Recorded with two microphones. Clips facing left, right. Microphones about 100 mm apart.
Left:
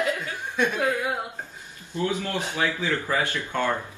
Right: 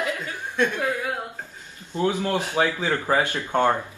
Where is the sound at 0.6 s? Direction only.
15° left (ahead or behind).